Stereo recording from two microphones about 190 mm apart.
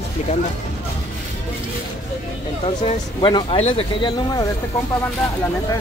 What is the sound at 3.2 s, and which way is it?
Speech, 25° left (ahead or behind).